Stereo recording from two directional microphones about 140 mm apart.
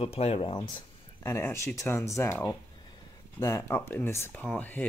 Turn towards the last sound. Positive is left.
turn(degrees=10)  # may be behind; listen again after turning